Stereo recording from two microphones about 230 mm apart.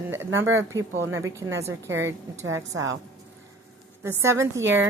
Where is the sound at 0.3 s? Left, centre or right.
Right.